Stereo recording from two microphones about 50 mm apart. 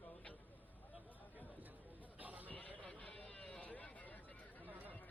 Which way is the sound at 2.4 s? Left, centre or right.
Left.